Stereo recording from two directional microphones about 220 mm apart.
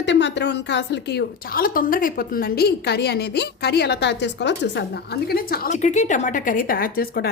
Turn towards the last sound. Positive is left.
turn(degrees=45)  # may be behind; listen again after turning